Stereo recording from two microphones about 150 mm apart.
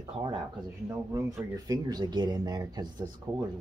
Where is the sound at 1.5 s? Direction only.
25° right (ahead or behind).